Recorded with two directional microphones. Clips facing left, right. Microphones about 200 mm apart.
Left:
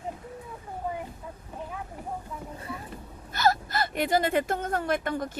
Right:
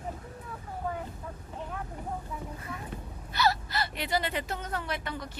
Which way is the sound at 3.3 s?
45° left (ahead or behind).